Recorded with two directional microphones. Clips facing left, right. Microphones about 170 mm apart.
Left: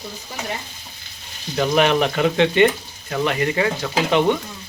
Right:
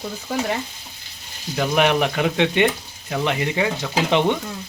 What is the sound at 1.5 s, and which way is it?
Speech, 10° right (ahead or behind).